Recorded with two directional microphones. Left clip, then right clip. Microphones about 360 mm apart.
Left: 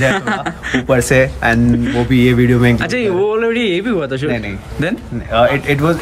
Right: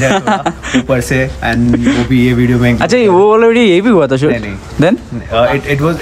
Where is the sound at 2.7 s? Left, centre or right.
Centre.